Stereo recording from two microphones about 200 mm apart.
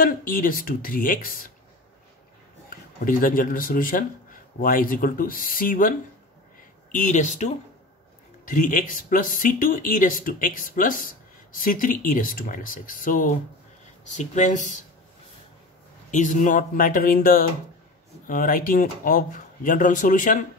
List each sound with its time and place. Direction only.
0.0 s speech: 45° left (ahead or behind)
2.7 s speech: 45° left (ahead or behind)
16.1 s speech: 40° left (ahead or behind)